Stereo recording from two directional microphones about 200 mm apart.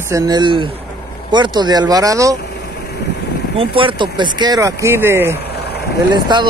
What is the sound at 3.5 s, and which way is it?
Speech, 25° right (ahead or behind).